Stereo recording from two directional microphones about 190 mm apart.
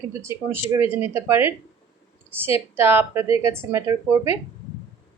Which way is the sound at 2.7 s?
10° right (ahead or behind).